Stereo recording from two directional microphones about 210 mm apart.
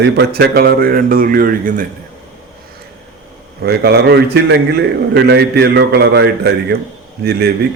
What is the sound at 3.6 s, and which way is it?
A man's voice, 50° right (ahead or behind).